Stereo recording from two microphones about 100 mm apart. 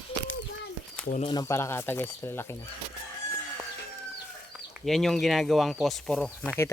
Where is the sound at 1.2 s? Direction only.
45° left (ahead or behind).